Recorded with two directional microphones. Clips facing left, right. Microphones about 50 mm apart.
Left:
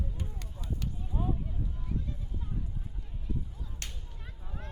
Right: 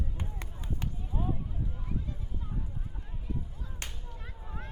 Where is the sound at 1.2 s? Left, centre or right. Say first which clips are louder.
Even; centre.